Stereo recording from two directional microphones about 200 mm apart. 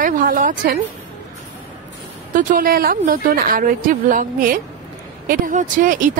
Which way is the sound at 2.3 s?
45° right (ahead or behind).